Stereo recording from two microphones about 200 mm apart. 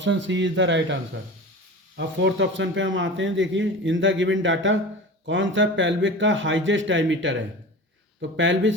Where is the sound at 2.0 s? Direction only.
65° right (ahead or behind).